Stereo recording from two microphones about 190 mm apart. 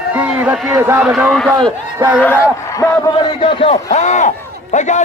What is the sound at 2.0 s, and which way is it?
Speech, 10° right (ahead or behind).